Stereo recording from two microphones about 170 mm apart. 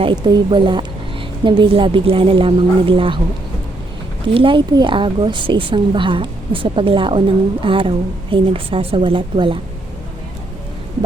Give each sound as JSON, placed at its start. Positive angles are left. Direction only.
{"t": 0.0, "sound": "a woman's voice", "side_deg": -25}
{"t": 4.4, "sound": "a woman's voice", "side_deg": -30}